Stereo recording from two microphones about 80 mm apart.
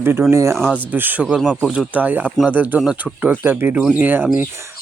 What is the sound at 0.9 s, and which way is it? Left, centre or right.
Speech, right.